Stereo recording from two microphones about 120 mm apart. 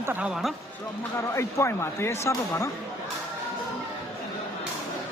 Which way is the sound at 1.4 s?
25° left (ahead or behind).